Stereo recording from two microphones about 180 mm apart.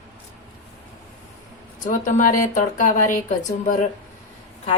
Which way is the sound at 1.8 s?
45° left (ahead or behind).